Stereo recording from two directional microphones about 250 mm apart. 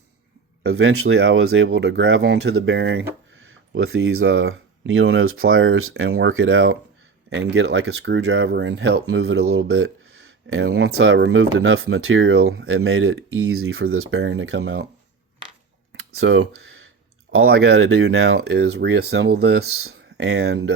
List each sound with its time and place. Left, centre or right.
0.6 s speech: right
6.1 s speech: right
6.3 s speech: right
15.9 s a sound: right
17.4 s speech: right
18.3 s speech: right
19.7 s speech: right